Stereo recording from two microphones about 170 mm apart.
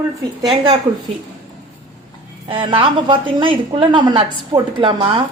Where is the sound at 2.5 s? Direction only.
30° right (ahead or behind).